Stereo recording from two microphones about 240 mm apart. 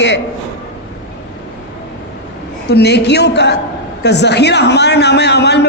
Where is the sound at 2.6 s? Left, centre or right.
Left.